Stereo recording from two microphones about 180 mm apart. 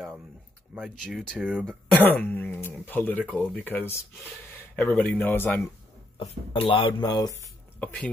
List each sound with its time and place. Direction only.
0.7 s speech: centre (ahead or behind)
6.1 s speech: 30° left (ahead or behind)
7.8 s speech: 5° left (ahead or behind)